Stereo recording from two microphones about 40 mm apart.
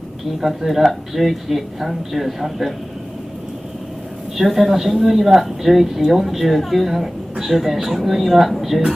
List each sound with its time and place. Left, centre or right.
0.4 s speech: centre
4.4 s speech: centre